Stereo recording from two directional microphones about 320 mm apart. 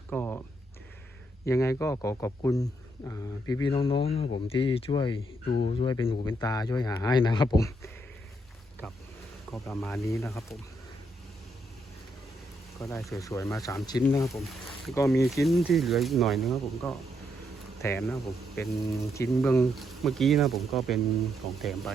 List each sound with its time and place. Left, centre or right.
0.1 s a sound: centre
1.5 s speech: centre
5.5 s speech: left
5.7 s speech: centre
9.5 s speech: centre
12.8 s speech: centre